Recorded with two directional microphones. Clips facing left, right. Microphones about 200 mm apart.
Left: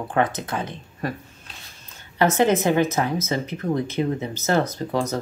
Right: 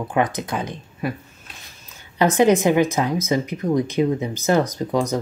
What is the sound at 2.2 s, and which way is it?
Speech, 15° right (ahead or behind).